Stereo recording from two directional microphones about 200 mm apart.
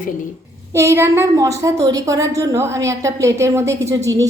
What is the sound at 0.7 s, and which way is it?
A woman's voice, 15° right (ahead or behind).